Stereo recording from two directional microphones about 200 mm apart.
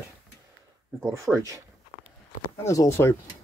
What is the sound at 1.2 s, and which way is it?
Speech, 15° right (ahead or behind).